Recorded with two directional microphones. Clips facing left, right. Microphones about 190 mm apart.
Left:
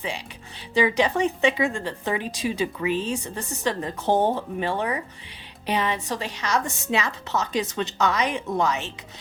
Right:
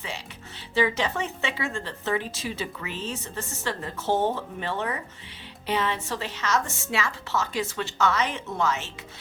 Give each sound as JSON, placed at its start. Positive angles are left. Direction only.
{"t": 0.7, "sound": "speech", "side_deg": 15}